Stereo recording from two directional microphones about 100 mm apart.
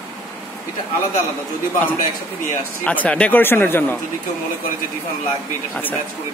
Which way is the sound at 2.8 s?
15° left (ahead or behind).